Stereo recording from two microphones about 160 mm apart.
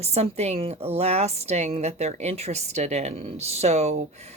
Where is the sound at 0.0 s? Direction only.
40° right (ahead or behind).